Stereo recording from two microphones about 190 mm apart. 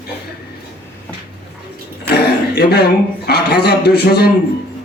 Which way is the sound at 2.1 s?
55° left (ahead or behind).